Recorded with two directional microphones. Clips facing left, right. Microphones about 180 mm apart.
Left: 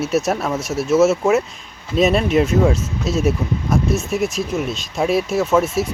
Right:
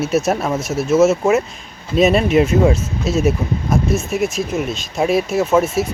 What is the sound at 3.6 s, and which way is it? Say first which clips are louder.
Speech: right 1 dB; 20° right (ahead or behind).